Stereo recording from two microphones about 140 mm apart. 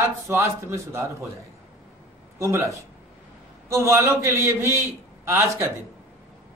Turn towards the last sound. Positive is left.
turn(degrees=-20)  # may be behind; listen again after turning